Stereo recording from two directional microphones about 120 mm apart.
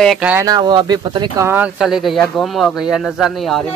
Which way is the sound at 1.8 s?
Centre (ahead or behind).